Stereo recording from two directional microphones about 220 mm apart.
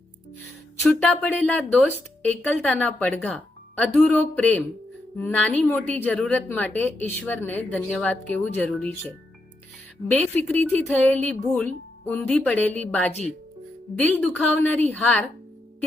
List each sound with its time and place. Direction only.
0.8 s a woman's voice: 5° left (ahead or behind)